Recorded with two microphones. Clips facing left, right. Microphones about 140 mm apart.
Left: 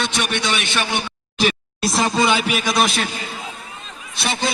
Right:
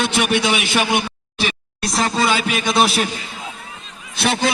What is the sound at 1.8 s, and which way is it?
Speech, centre (ahead or behind).